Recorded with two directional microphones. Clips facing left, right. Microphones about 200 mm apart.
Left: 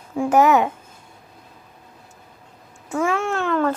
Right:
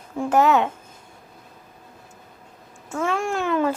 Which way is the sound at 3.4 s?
10° right (ahead or behind).